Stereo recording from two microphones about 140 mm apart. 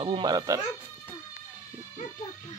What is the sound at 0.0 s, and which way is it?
Speech, 35° right (ahead or behind).